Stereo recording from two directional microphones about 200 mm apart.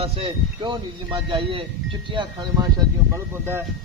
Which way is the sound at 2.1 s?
25° right (ahead or behind).